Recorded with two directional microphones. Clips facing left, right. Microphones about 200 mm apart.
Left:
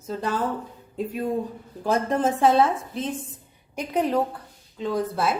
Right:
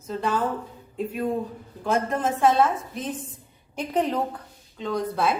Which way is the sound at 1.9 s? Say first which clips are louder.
Left 2 dB; 35° left (ahead or behind).